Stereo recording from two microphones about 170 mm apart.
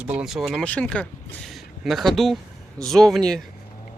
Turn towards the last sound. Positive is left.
turn(degrees=5)  # may be behind; listen again after turning